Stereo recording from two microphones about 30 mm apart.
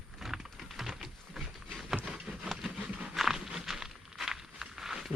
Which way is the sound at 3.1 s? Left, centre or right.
Centre.